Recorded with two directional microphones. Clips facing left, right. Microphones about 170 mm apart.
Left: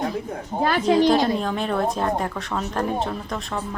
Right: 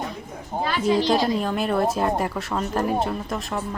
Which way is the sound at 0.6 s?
50° left (ahead or behind).